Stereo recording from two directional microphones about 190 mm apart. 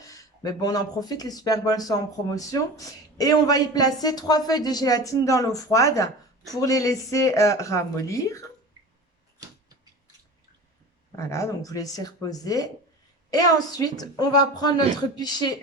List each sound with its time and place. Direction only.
0.0 s speech: 20° left (ahead or behind)
11.2 s speech: 15° left (ahead or behind)